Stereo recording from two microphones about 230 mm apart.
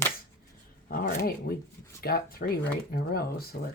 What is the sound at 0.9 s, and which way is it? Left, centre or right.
Speech, left.